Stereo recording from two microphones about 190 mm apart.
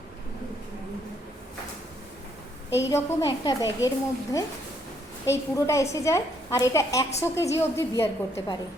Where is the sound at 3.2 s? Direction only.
20° left (ahead or behind).